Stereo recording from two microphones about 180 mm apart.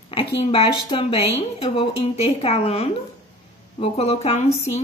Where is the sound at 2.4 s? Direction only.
35° left (ahead or behind).